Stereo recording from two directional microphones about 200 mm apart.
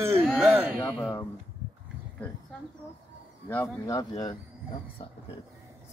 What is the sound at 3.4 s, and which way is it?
Speech, 10° left (ahead or behind).